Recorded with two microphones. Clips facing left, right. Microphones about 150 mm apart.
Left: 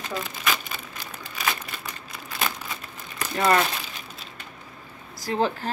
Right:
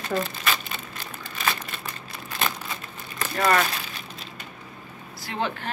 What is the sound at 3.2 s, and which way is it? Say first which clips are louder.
Speech: left 1 dB; 15° left (ahead or behind).